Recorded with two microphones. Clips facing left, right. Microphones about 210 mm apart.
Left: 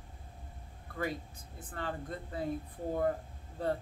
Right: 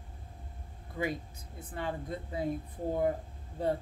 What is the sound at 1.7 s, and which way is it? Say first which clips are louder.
Speech: right 3 dB; 10° right (ahead or behind).